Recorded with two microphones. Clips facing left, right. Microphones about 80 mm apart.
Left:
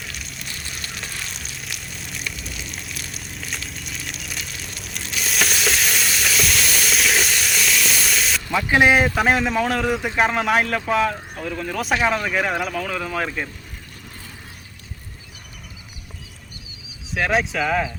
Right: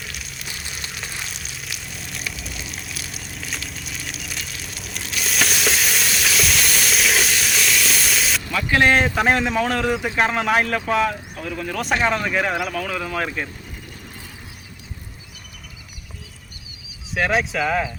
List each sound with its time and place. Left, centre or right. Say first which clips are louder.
0.0 s a sound: even; centre
8.4 s speech: left 2 dB; left
9.1 s speech: even; centre
17.2 s speech: even; centre